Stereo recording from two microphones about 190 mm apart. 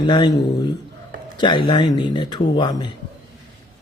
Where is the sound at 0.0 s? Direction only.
25° left (ahead or behind).